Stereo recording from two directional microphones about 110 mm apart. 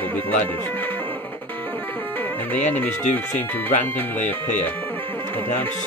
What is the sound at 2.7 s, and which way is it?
Speech, 15° left (ahead or behind).